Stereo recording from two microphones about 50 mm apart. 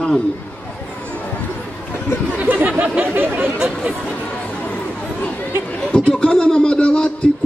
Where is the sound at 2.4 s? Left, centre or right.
Right.